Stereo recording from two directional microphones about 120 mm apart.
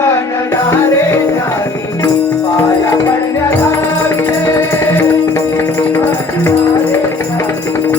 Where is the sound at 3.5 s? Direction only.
20° left (ahead or behind).